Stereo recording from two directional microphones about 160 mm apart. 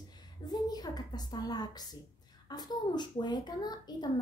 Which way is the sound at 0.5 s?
25° left (ahead or behind).